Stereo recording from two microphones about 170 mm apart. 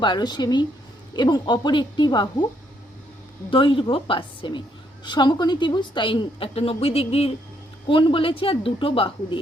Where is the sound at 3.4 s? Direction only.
30° left (ahead or behind).